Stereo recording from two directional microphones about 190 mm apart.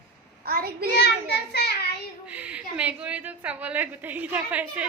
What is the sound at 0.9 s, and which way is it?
Child singing, 60° left (ahead or behind).